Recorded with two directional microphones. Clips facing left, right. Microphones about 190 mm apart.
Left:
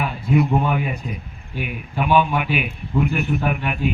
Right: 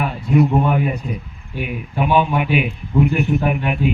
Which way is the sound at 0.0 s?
40° right (ahead or behind).